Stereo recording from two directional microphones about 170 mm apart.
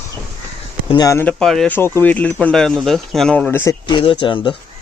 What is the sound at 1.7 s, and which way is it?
Speech, 15° left (ahead or behind).